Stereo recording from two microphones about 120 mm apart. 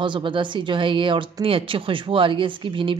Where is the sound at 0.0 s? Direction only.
45° right (ahead or behind).